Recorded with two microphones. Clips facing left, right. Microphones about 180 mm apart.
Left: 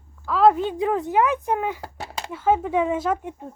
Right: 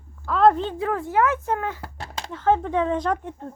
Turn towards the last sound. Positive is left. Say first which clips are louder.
# left 1 dB
turn(degrees=10)  # may be behind; listen again after turning